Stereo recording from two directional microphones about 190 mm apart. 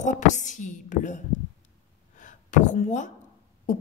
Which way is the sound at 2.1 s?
40° left (ahead or behind).